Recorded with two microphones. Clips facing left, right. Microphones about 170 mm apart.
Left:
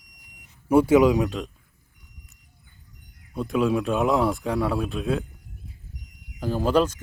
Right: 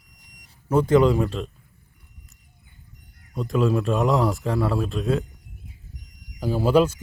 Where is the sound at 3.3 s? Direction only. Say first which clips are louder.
Right 1 dB; centre (ahead or behind).